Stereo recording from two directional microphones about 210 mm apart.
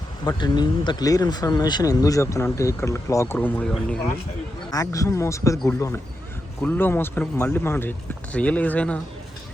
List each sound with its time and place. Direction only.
0.3 s speech: 20° left (ahead or behind)
4.7 s speech: 15° left (ahead or behind)